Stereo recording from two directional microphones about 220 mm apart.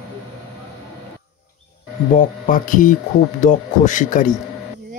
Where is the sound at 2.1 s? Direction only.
35° left (ahead or behind).